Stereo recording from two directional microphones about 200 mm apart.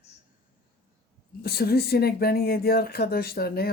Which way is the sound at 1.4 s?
50° left (ahead or behind).